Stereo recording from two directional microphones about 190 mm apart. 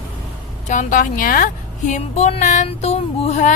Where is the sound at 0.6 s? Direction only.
40° left (ahead or behind).